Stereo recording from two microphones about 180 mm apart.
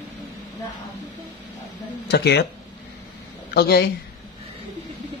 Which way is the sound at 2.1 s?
70° left (ahead or behind).